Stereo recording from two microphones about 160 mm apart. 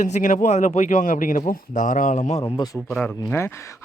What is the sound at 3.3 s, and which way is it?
Speech, 15° left (ahead or behind).